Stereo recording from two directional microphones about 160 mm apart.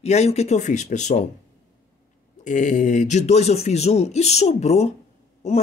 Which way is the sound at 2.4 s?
50° left (ahead or behind).